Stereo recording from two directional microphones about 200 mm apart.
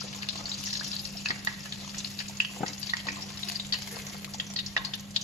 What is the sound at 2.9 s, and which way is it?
Frying, 35° left (ahead or behind).